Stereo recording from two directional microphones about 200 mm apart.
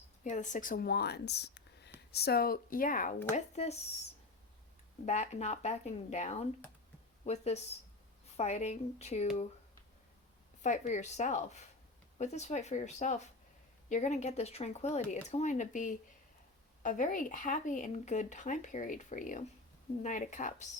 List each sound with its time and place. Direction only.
0.3 s speech: 40° left (ahead or behind)
3.3 s speech: 35° left (ahead or behind)
5.0 s speech: 35° left (ahead or behind)
10.6 s speech: 35° left (ahead or behind)